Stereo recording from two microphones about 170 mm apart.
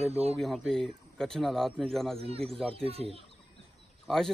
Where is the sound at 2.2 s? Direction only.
35° right (ahead or behind).